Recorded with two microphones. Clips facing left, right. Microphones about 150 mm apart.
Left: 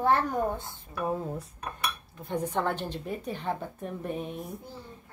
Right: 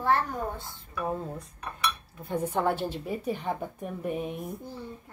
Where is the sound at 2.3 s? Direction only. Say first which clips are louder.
Right 2 dB; 10° right (ahead or behind).